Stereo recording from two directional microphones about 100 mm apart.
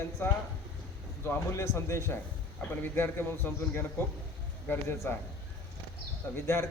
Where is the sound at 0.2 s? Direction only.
20° left (ahead or behind).